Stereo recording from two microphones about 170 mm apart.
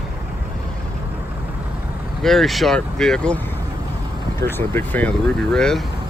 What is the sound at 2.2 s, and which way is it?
Speech, centre (ahead or behind).